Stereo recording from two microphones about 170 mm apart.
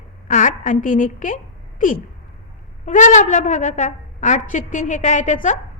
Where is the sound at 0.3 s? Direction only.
50° left (ahead or behind).